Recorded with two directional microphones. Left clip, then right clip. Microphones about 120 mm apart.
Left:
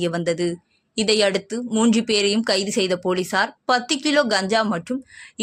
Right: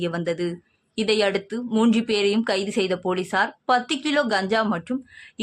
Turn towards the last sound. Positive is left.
turn(degrees=25)  # may be behind; listen again after turning